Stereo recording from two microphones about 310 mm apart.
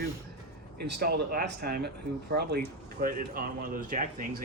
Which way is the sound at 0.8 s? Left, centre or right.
Right.